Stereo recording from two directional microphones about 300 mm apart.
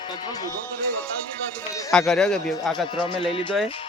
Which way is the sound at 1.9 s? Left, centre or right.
Centre.